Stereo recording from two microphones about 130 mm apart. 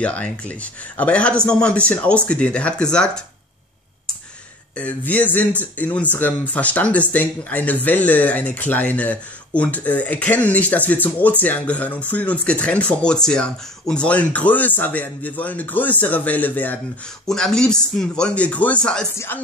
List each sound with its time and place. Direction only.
0.0 s speech: 10° left (ahead or behind)
4.7 s speech: 10° left (ahead or behind)
19.1 s speech: 15° left (ahead or behind)